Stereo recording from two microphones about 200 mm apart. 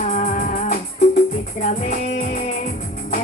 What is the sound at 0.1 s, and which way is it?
Music, 35° left (ahead or behind).